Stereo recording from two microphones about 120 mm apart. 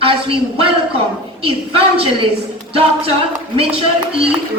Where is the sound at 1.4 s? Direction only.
50° right (ahead or behind).